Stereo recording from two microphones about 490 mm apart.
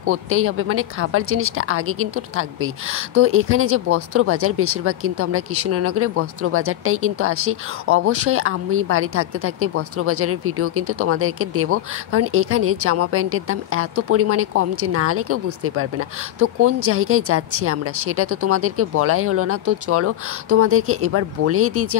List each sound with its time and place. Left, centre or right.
0.0 s speech: right